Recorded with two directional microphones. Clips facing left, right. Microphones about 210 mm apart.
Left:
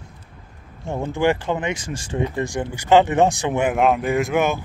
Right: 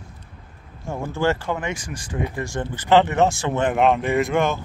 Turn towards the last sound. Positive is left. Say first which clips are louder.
# left 1 dB
turn(degrees=5)  # may be behind; listen again after turning